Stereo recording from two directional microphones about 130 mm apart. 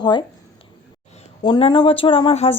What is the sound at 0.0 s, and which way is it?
Speech, 35° left (ahead or behind).